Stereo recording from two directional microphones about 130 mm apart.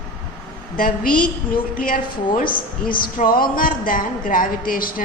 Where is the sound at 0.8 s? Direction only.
90° left.